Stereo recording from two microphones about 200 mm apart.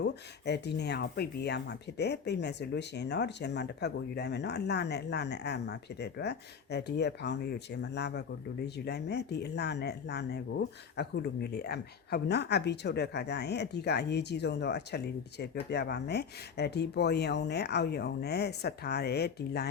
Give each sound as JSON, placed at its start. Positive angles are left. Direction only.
{"t": 0.0, "sound": "speech", "side_deg": 55}